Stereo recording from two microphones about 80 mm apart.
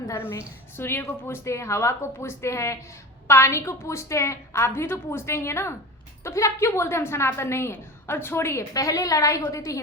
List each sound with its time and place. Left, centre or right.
0.1 s a woman's voice: left
8.7 s a woman's voice: left